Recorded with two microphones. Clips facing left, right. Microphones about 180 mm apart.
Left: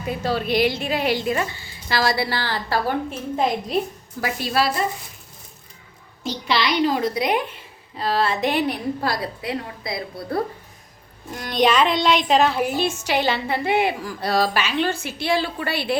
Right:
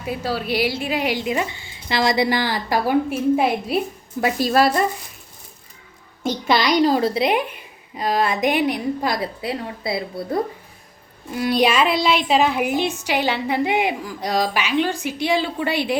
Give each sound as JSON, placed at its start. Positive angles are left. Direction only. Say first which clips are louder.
{"t": 0.0, "sound": "a woman's voice", "louder": "left 1 dB", "side_deg": -10}
{"t": 4.4, "sound": "speech", "louder": "right 5 dB", "side_deg": -45}
{"t": 6.2, "sound": "a woman's voice", "louder": "right 4 dB", "side_deg": -45}
{"t": 11.3, "sound": "a woman's voice", "louder": "right 1 dB", "side_deg": -5}